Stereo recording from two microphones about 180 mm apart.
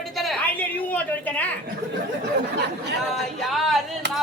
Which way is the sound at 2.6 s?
70° right (ahead or behind).